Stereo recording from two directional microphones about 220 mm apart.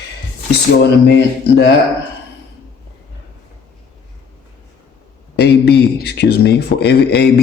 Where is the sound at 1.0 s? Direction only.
50° left (ahead or behind).